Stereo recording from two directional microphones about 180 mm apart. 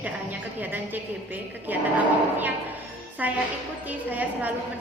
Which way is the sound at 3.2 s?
10° right (ahead or behind).